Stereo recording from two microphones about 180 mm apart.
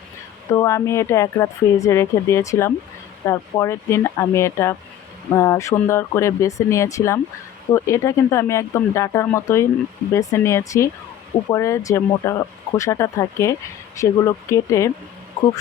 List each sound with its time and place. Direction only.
0.5 s speech: 15° left (ahead or behind)